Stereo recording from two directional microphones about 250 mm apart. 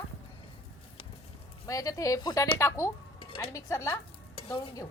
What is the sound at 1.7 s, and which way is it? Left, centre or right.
A woman's voice, centre.